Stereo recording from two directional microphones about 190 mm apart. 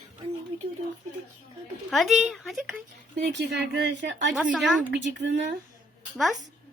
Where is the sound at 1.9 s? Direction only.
Centre (ahead or behind).